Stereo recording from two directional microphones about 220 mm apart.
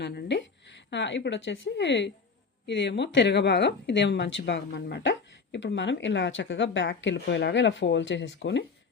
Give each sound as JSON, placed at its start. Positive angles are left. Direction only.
{"t": 0.0, "sound": "a woman's voice", "side_deg": 55}